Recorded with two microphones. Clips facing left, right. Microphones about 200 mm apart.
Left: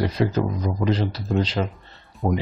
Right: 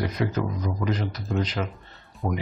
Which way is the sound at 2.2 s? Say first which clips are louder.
Left 5 dB; 15° left (ahead or behind).